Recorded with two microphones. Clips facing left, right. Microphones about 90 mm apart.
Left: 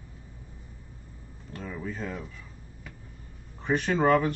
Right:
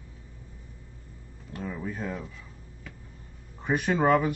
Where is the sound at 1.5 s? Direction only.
5° right (ahead or behind).